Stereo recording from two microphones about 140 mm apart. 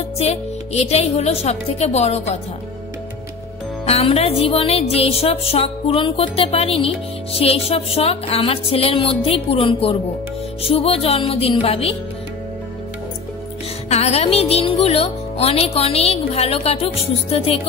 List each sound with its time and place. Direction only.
0.2 s speech: 50° left (ahead or behind)
3.8 s speech: 45° left (ahead or behind)
13.8 s speech: 50° left (ahead or behind)